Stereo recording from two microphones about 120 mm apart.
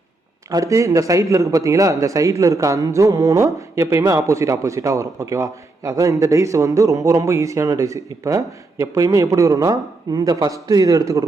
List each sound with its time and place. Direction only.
0.5 s speech: 25° right (ahead or behind)